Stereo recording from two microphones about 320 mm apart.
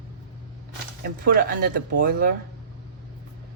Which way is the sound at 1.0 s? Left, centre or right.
Right.